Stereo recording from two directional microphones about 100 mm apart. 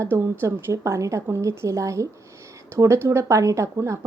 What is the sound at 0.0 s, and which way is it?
A woman's voice, 25° right (ahead or behind).